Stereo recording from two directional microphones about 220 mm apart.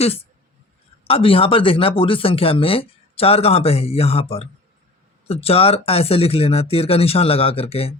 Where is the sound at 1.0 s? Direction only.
25° left (ahead or behind).